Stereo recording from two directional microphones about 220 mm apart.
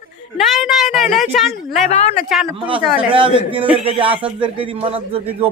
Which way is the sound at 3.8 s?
25° right (ahead or behind).